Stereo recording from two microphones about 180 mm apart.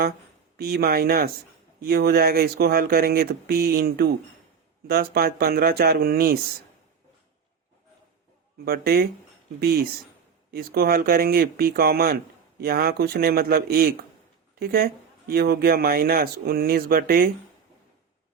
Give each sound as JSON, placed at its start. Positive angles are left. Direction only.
{"t": 0.5, "sound": "speech", "side_deg": -60}
{"t": 8.6, "sound": "speech", "side_deg": -60}